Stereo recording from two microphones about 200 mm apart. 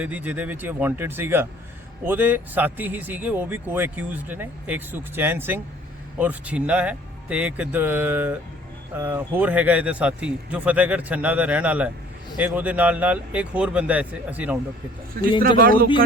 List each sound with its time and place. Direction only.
0.0 s speech: 10° right (ahead or behind)
15.4 s a man's voice: 45° right (ahead or behind)